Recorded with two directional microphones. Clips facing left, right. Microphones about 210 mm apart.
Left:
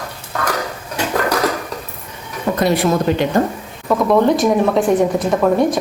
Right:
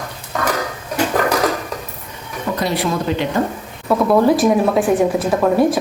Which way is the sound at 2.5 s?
50° left (ahead or behind).